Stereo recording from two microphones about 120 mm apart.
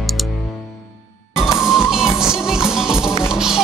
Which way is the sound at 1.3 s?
5° right (ahead or behind).